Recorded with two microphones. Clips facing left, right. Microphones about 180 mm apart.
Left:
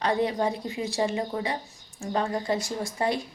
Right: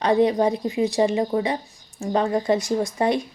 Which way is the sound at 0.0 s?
20° right (ahead or behind).